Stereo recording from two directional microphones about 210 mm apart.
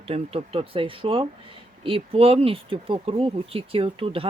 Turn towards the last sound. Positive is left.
turn(degrees=-25)  # may be behind; listen again after turning